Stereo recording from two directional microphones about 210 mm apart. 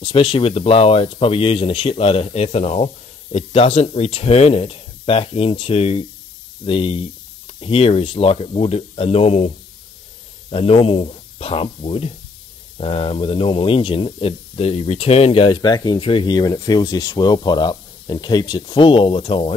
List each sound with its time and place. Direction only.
0.0 s speech: 25° left (ahead or behind)
10.5 s speech: 25° left (ahead or behind)